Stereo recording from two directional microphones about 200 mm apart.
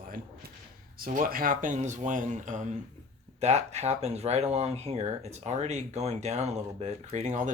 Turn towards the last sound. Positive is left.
turn(degrees=-35)  # may be behind; listen again after turning